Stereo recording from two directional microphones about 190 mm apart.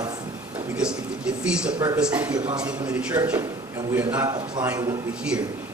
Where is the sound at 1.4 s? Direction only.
5° right (ahead or behind).